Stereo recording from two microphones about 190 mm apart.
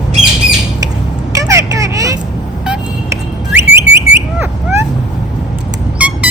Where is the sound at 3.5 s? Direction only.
10° right (ahead or behind).